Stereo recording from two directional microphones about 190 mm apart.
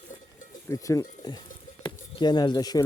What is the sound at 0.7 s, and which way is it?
Speech, 15° left (ahead or behind).